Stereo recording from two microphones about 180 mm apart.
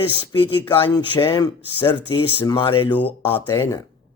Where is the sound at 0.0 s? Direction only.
30° left (ahead or behind).